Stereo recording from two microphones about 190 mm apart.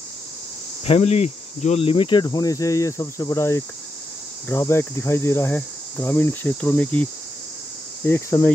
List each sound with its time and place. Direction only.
0.8 s cricket: 30° left (ahead or behind); by 8.5 s 10° left (ahead or behind)